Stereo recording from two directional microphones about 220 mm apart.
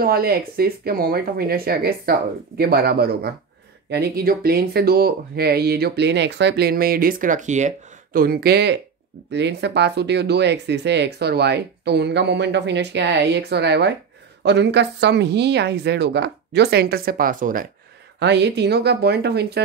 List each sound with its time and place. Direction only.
0.0 s speech: 45° right (ahead or behind)
18.2 s speech: 50° right (ahead or behind)